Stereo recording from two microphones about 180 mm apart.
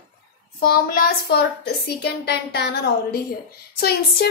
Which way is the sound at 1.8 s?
65° left (ahead or behind).